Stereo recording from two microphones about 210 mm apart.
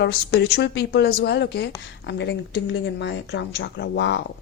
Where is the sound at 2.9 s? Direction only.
55° left (ahead or behind).